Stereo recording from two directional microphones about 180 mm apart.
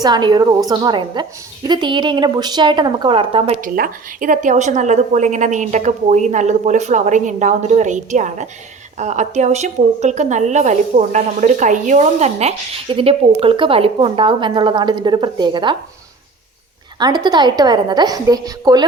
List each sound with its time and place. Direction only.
0.0 s a woman's voice: 25° right (ahead or behind)
3.6 s a woman's voice: 50° right (ahead or behind); by 15.7 s 25° right (ahead or behind)
17.0 s a woman's voice: 25° right (ahead or behind)